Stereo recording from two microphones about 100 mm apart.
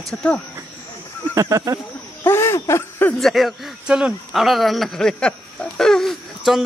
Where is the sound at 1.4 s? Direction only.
30° right (ahead or behind).